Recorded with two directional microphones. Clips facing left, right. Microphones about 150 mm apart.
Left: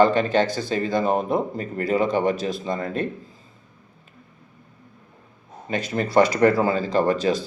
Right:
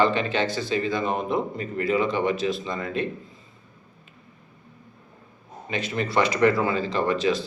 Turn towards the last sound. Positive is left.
turn(degrees=40)  # may be behind; listen again after turning